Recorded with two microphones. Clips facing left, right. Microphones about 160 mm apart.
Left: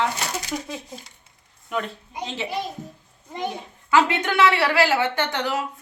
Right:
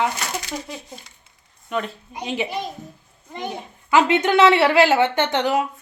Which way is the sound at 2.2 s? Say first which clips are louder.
Right 5 dB; 15° right (ahead or behind).